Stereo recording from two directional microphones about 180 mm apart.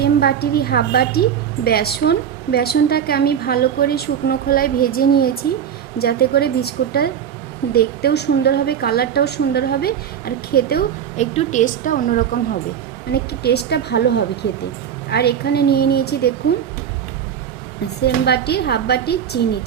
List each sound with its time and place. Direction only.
0.0 s a woman's voice: 60° left (ahead or behind)
11.2 s a woman's voice: 40° left (ahead or behind)
13.1 s speech: 65° left (ahead or behind)
15.1 s a woman's voice: 65° left (ahead or behind)
18.0 s a woman's voice: 65° left (ahead or behind)